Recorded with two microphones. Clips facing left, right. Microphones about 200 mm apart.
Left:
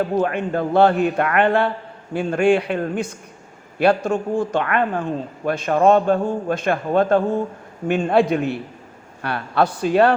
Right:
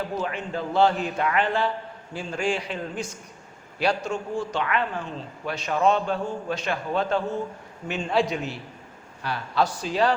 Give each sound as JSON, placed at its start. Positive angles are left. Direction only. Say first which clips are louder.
{"t": 0.2, "sound": "a man's voice", "louder": "left 9 dB", "side_deg": 55}